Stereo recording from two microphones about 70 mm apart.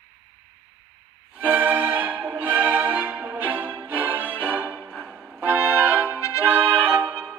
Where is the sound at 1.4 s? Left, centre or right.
Right.